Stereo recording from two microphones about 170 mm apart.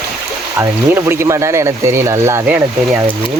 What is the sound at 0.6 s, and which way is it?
Speech, 15° right (ahead or behind).